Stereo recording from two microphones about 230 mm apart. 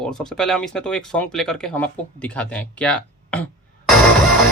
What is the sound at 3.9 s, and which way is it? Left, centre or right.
Music, centre.